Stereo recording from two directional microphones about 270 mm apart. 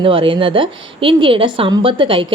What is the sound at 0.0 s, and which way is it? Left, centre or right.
A woman's voice, centre.